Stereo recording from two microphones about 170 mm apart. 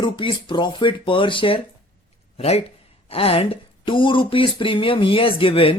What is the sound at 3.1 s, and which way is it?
Speech, 35° left (ahead or behind).